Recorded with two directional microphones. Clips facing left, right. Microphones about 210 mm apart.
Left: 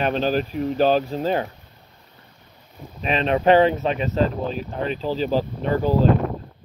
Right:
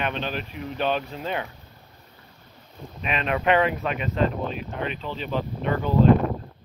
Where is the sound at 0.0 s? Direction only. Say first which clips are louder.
Left 8 dB; 35° left (ahead or behind).